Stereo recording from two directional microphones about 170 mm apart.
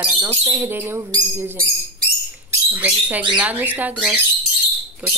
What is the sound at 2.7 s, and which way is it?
Speech, 10° right (ahead or behind).